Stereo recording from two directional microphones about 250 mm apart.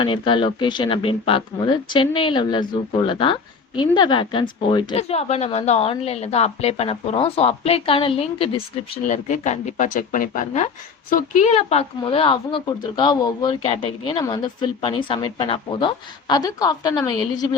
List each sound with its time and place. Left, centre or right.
0.0 s speech: centre